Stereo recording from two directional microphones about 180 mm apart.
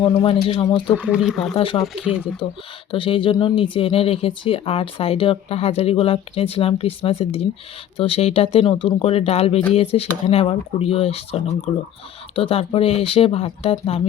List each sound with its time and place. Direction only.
0.0 s speech: 30° left (ahead or behind)
1.1 s speech: 5° right (ahead or behind)
1.5 s speech: 30° left (ahead or behind)
1.8 s speech: 5° right (ahead or behind)
2.9 s speech: 30° left (ahead or behind)